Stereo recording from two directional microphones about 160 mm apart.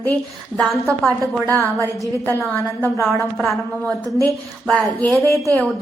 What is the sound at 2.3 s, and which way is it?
Speech, 15° left (ahead or behind).